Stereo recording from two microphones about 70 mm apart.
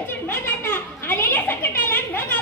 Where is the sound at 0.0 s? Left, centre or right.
Left.